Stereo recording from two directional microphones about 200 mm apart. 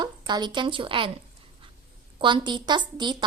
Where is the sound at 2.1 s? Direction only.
25° right (ahead or behind).